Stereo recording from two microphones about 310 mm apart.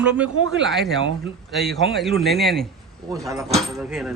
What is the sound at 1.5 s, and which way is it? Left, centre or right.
A woman's voice, centre.